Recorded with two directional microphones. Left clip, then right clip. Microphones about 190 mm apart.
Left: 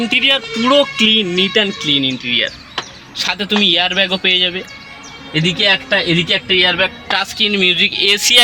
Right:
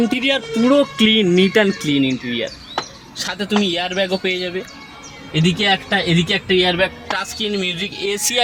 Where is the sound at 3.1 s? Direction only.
20° left (ahead or behind).